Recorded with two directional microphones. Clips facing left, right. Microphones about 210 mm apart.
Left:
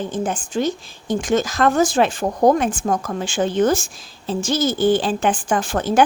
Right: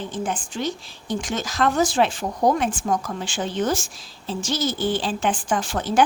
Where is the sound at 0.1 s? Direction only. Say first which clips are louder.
Left 5 dB; 45° left (ahead or behind).